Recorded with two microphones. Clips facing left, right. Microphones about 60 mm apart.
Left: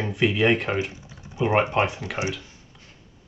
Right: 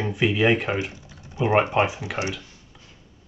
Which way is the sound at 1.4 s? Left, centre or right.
Centre.